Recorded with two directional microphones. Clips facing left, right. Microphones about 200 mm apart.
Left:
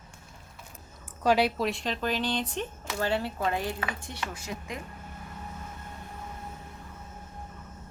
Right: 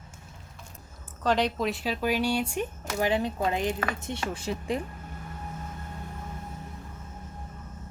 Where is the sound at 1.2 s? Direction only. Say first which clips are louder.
Left 1 dB; 10° left (ahead or behind); by 4.8 s 30° right (ahead or behind).